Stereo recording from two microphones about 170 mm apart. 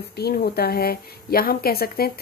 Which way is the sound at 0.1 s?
65° left (ahead or behind).